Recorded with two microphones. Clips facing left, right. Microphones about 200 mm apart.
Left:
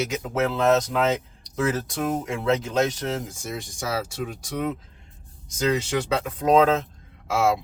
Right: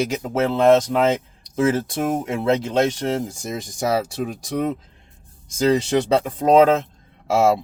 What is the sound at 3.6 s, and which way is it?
Speech, 40° right (ahead or behind).